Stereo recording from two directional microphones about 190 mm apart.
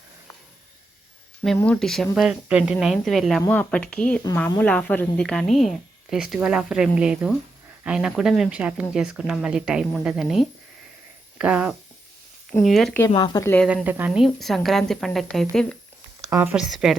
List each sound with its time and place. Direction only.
1.5 s a woman's voice: 5° left (ahead or behind)
13.1 s speech: 20° left (ahead or behind)
13.7 s a woman's voice: 10° right (ahead or behind)
16.2 s a woman's voice: 15° right (ahead or behind)